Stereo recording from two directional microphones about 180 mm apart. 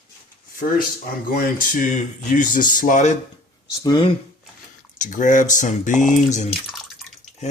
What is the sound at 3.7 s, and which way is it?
Speech, 20° left (ahead or behind).